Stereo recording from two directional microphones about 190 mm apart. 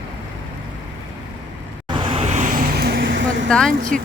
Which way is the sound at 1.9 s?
25° right (ahead or behind).